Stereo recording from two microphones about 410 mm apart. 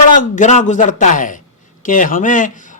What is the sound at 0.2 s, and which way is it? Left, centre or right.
Speech, centre.